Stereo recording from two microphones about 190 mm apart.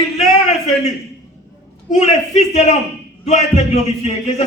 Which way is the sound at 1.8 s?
35° left (ahead or behind).